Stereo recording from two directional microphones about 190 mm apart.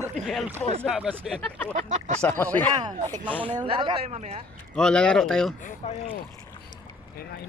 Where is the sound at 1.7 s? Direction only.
40° right (ahead or behind).